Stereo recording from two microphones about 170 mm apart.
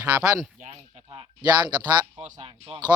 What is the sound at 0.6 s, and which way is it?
Speech, 35° right (ahead or behind).